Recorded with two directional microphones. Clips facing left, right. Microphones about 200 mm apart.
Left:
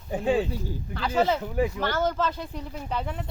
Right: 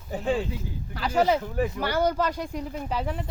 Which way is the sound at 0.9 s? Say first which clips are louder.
Right 1 dB; 10° right (ahead or behind).